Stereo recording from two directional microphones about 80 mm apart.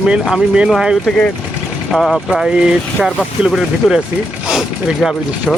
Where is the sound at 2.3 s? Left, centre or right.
Centre.